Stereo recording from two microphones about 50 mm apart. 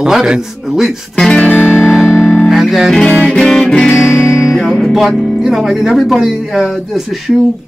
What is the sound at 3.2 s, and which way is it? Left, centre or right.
Music, centre.